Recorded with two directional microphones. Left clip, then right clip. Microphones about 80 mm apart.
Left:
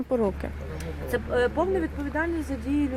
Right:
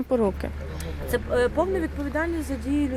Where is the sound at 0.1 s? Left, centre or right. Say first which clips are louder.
Right 2 dB; centre.